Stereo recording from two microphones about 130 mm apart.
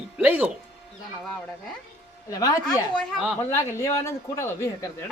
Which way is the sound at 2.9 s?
5° left (ahead or behind).